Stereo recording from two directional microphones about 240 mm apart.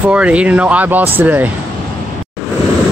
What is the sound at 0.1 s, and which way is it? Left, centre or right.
Speech, centre.